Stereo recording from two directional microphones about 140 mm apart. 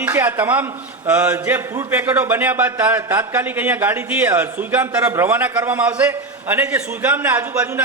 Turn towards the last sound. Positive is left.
turn(degrees=-15)  # may be behind; listen again after turning